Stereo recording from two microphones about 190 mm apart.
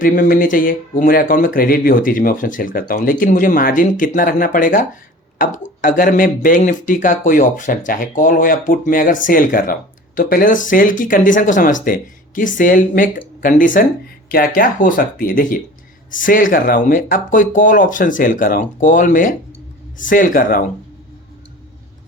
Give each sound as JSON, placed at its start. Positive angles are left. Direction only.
{"t": 0.0, "sound": "speech", "side_deg": 45}